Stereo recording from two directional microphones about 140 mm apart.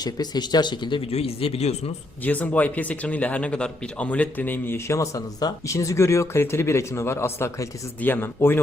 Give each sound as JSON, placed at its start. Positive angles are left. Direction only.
{"t": 0.0, "sound": "speech", "side_deg": 30}
{"t": 2.2, "sound": "speech", "side_deg": 10}